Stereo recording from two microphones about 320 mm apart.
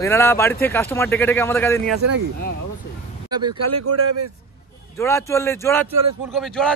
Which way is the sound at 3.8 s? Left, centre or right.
Right.